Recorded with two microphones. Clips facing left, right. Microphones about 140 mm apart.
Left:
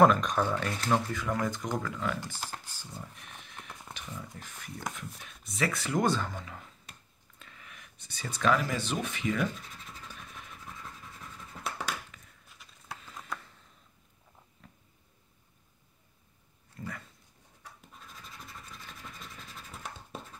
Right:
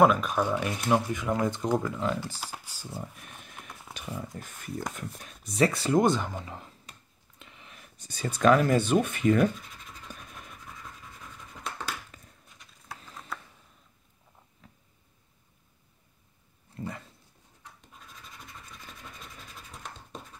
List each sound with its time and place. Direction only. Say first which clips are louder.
0.0 s speech: right 1 dB; 5° right (ahead or behind)
2.2 s speech: right 1 dB; 5° right (ahead or behind)
2.8 s speech: right 5 dB; 45° right (ahead or behind)
3.5 s a sound: left 1 dB; centre (ahead or behind)
3.9 s speech: right 7 dB; 45° right (ahead or behind)
5.5 s speech: right 7 dB; 35° right (ahead or behind)
6.0 s speech: right 4 dB; 15° right (ahead or behind)
6.4 s speech: right 4 dB; 30° right (ahead or behind)
7.3 s a sound: right 2 dB; 20° right (ahead or behind)
7.7 s speech: right 2 dB; 40° right (ahead or behind)
12.4 s a sound: even; centre (ahead or behind)
16.7 s dog: right 4 dB; 25° right (ahead or behind)
19.7 s scratch: left 1 dB; 5° left (ahead or behind)